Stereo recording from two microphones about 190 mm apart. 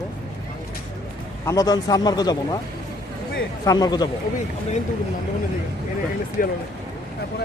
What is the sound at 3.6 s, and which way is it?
Speech, 20° left (ahead or behind).